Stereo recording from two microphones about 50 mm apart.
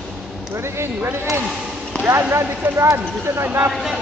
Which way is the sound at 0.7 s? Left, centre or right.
Right.